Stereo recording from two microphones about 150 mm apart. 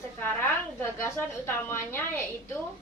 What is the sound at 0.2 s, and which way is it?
A woman's voice, 15° left (ahead or behind).